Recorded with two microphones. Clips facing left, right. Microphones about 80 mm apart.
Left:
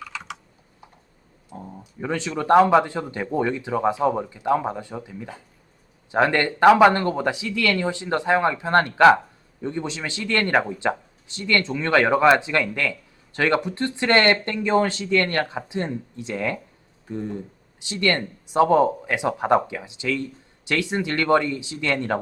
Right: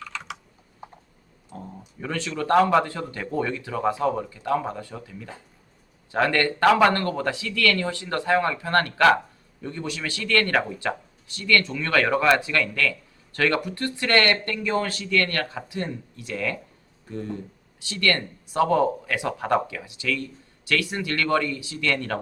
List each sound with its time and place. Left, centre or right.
0.0 s typing: centre
1.5 s a sound: centre
2.0 s speech: centre